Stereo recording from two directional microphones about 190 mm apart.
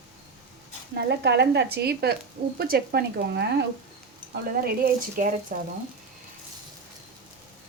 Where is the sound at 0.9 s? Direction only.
60° right (ahead or behind).